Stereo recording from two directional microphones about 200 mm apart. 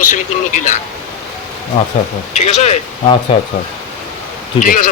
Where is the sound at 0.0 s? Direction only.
40° left (ahead or behind).